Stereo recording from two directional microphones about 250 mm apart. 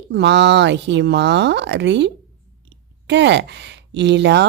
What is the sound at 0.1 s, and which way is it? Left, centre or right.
A woman's voice, right.